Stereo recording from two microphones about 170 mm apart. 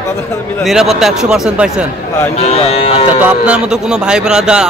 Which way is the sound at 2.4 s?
35° left (ahead or behind).